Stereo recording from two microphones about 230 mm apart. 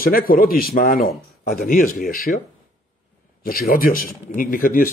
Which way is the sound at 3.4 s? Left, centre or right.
Left.